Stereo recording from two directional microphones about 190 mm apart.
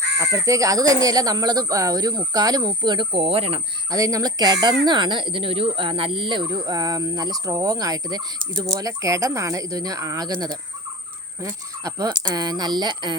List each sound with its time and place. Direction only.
0.2 s speech: 15° right (ahead or behind)
3.9 s speech: 20° right (ahead or behind)